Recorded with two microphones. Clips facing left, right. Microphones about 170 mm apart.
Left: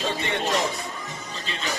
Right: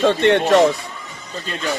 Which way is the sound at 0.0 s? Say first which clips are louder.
Right 12 dB; 75° right (ahead or behind).